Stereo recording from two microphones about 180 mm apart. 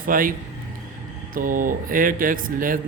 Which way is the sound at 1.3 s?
50° right (ahead or behind).